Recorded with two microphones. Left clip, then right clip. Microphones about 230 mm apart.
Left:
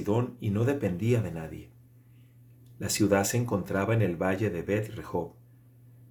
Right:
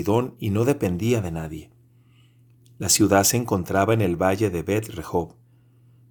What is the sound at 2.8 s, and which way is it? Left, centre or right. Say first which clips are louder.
Speech: right 7 dB; right.